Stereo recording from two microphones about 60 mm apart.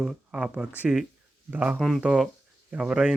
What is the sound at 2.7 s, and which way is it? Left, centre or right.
Speech, centre.